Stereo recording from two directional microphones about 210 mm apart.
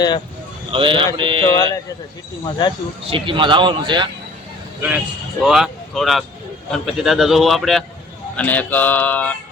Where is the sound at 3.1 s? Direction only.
25° right (ahead or behind).